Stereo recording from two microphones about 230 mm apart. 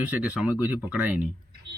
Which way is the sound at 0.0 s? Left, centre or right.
Centre.